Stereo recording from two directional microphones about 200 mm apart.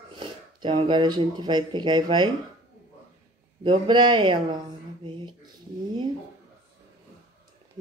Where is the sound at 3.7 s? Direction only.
20° right (ahead or behind).